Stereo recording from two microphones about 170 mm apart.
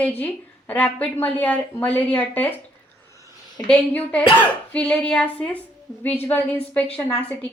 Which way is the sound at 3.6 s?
5° left (ahead or behind).